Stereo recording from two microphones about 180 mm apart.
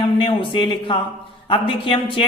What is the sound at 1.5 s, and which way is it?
Speech, 30° left (ahead or behind).